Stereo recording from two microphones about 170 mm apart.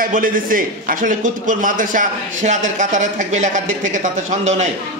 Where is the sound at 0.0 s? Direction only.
55° right (ahead or behind).